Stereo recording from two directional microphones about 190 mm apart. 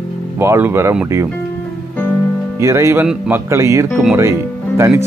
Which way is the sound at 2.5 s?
15° right (ahead or behind).